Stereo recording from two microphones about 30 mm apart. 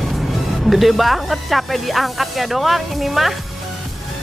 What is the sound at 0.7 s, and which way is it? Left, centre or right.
Speech, centre.